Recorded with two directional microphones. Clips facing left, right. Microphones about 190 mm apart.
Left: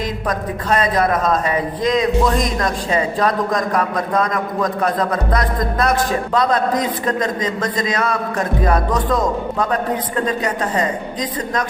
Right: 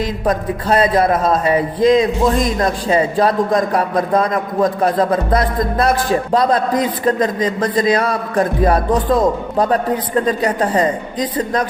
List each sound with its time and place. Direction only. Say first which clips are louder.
0.3 s a man's voice: right 4 dB; 30° right (ahead or behind)